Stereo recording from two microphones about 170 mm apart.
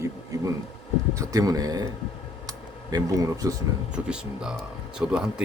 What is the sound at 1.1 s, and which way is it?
Speech, 20° right (ahead or behind).